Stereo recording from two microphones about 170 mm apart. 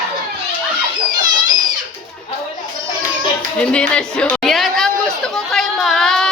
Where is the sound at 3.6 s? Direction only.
5° left (ahead or behind).